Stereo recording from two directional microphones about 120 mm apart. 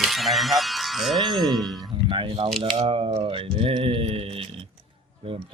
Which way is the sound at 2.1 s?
45° right (ahead or behind).